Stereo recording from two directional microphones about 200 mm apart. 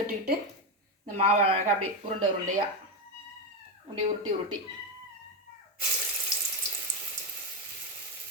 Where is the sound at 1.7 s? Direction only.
90° right.